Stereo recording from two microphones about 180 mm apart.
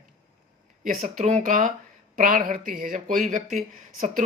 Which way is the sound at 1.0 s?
40° right (ahead or behind).